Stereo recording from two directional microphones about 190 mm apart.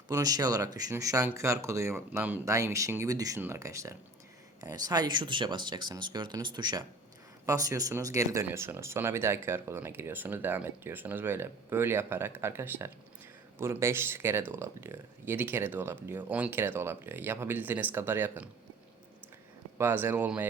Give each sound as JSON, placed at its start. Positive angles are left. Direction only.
{"t": 0.1, "sound": "speech", "side_deg": -20}
{"t": 19.8, "sound": "speech", "side_deg": -10}